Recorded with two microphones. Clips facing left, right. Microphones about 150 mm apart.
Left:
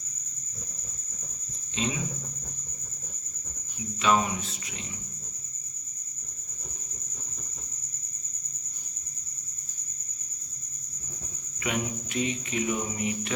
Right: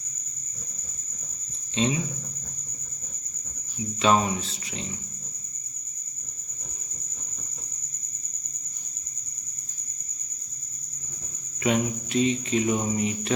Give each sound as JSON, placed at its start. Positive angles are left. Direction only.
{"t": 1.7, "sound": "speech", "side_deg": -30}
{"t": 4.0, "sound": "speech", "side_deg": -30}
{"t": 11.6, "sound": "cricket", "side_deg": -30}